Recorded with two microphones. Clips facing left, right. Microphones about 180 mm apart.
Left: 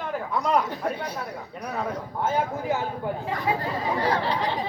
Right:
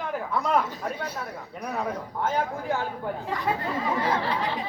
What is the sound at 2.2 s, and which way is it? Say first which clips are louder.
A man's voice: left 2 dB; 5° left (ahead or behind).